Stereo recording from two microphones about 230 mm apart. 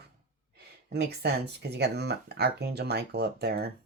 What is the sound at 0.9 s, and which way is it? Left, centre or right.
Speech, right.